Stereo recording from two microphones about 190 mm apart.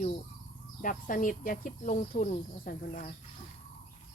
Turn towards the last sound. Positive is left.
turn(degrees=45)  # may be behind; listen again after turning